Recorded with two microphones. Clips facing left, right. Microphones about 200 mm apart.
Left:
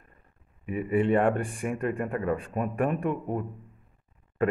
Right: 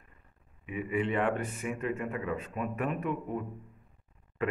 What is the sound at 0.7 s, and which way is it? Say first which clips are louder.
Speech: left 7 dB; 45° left (ahead or behind).